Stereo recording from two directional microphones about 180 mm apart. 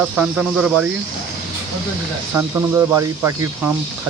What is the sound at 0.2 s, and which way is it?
Speech, 5° right (ahead or behind).